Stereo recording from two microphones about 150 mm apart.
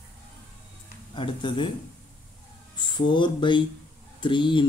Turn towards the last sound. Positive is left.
turn(degrees=30)  # may be behind; listen again after turning